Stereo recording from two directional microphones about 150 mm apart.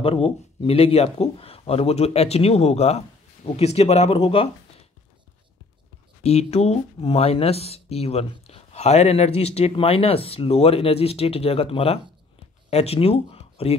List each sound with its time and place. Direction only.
0.0 s speech: 35° left (ahead or behind)
6.2 s speech: 45° left (ahead or behind)